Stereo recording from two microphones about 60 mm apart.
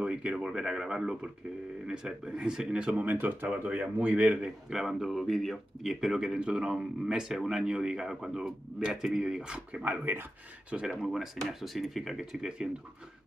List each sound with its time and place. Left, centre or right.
0.0 s a sound: centre
0.5 s a man's voice: centre
4.6 s a man's voice: centre
9.7 s speech: right
10.9 s speech: centre